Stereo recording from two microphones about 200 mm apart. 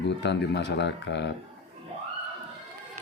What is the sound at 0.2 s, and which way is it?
Speech, 60° left (ahead or behind).